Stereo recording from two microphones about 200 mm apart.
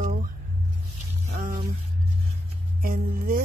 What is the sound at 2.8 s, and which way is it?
Speech, 45° right (ahead or behind).